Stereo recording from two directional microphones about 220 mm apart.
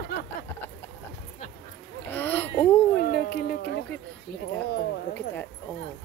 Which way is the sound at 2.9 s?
45° left (ahead or behind).